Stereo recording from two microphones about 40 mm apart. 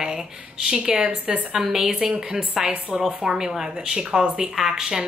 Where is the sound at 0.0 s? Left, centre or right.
Centre.